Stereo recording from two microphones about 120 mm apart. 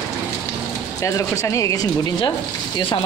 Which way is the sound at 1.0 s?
25° left (ahead or behind).